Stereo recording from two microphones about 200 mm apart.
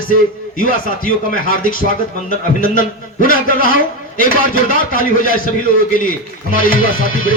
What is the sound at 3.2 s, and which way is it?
Speech, 45° left (ahead or behind).